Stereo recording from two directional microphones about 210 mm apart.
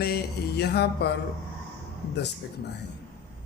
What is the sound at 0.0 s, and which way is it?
Mantra, 50° left (ahead or behind).